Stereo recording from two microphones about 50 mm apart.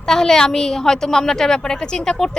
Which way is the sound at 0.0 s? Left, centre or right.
Centre.